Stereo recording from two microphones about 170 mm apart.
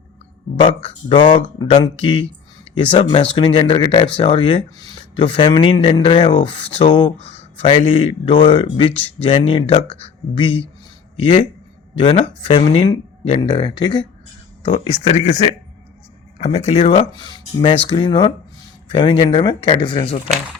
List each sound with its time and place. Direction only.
0.5 s speech: 35° left (ahead or behind)